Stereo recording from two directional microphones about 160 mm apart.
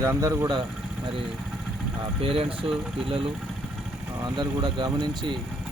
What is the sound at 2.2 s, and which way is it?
Speech, 35° right (ahead or behind).